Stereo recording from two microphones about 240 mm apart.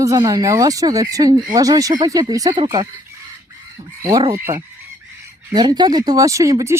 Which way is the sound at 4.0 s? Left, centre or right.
Centre.